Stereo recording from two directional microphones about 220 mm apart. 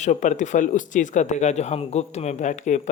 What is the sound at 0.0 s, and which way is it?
Speech, 35° left (ahead or behind).